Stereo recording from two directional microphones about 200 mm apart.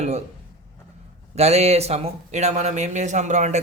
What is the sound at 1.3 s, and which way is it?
Speech, 30° right (ahead or behind).